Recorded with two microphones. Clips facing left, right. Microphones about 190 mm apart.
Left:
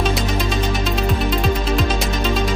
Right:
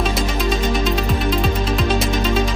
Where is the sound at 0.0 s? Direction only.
Centre (ahead or behind).